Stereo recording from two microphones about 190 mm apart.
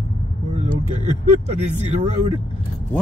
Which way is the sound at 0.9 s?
35° right (ahead or behind).